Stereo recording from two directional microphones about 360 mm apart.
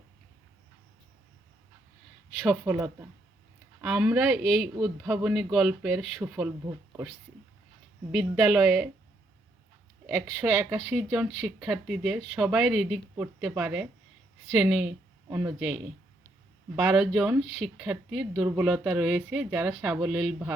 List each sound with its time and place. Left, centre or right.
2.4 s speech: centre
10.2 s a woman's voice: centre